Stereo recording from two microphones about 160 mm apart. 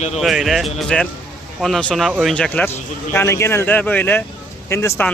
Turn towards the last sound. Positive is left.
turn(degrees=15)  # may be behind; listen again after turning